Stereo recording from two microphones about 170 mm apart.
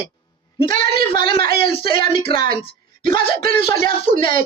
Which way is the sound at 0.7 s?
50° right (ahead or behind).